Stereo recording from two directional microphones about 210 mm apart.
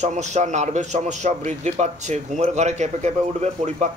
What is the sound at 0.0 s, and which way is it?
A man's voice, 35° right (ahead or behind).